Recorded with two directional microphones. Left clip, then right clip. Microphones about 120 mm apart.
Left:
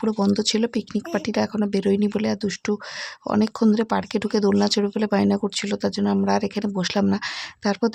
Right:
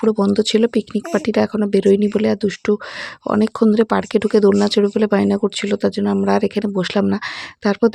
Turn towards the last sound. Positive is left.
turn(degrees=-35)  # may be behind; listen again after turning